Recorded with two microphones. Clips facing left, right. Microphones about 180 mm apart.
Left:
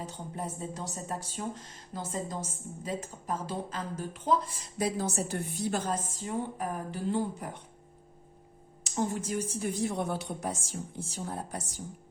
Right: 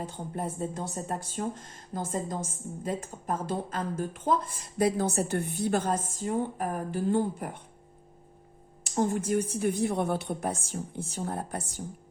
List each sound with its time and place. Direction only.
0.0 s speech: 55° right (ahead or behind)
8.8 s a woman's voice: 50° right (ahead or behind)